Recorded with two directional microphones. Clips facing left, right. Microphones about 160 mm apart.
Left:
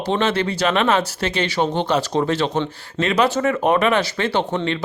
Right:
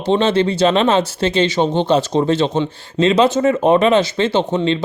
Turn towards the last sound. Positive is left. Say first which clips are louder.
# right 4 dB
turn(degrees=-20)  # may be behind; listen again after turning